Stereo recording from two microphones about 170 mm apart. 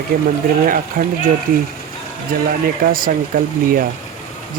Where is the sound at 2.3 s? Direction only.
60° right (ahead or behind).